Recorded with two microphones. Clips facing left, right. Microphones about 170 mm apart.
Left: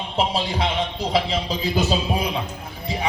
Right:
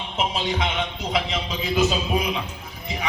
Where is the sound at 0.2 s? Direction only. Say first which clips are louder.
Left 2 dB; 35° left (ahead or behind).